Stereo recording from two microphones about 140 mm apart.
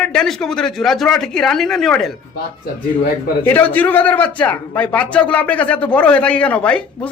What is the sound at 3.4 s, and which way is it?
A man's voice, 15° left (ahead or behind).